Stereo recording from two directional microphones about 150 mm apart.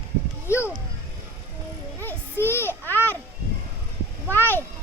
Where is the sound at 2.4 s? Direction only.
15° left (ahead or behind).